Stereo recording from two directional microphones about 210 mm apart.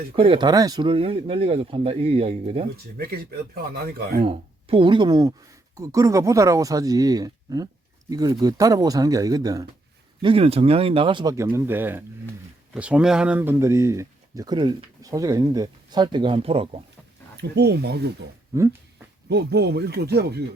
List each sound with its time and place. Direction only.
0.2 s speech: 20° right (ahead or behind)
3.0 s speech: 45° right (ahead or behind)
4.2 s speech: 25° right (ahead or behind)
17.3 s speech: 50° right (ahead or behind)
18.5 s speech: 15° right (ahead or behind)
19.3 s speech: 50° right (ahead or behind)